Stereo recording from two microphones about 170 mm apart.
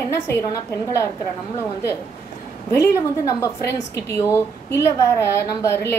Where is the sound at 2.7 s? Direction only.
15° left (ahead or behind).